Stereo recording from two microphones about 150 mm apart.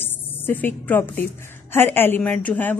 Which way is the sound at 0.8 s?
10° left (ahead or behind).